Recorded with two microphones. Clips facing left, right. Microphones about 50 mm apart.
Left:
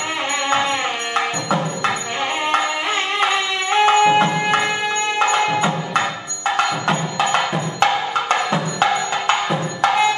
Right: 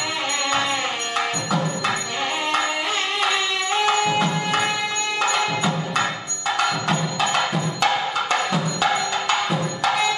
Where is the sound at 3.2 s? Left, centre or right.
Left.